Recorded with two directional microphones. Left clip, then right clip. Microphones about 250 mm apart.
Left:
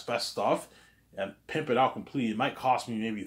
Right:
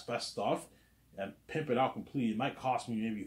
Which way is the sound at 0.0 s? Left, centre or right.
Centre.